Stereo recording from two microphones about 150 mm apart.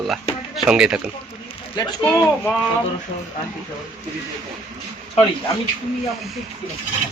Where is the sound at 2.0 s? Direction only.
10° left (ahead or behind).